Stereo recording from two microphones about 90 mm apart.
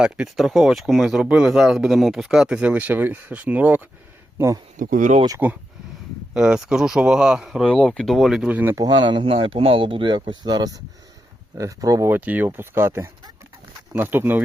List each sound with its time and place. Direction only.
0.0 s speech: 5° right (ahead or behind)
5.4 s speech: 15° right (ahead or behind)
7.6 s speech: 10° left (ahead or behind)
8.4 s speech: 15° right (ahead or behind)
8.7 s speech: 50° right (ahead or behind)
12.0 s speech: 20° right (ahead or behind)